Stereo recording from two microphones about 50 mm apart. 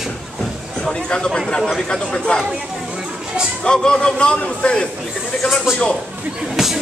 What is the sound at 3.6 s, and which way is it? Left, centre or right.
A man's voice, centre.